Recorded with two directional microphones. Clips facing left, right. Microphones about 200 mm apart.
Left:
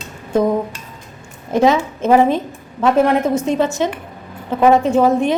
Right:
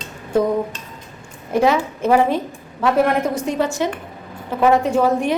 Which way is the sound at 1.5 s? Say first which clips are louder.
Left 2 dB; 20° left (ahead or behind).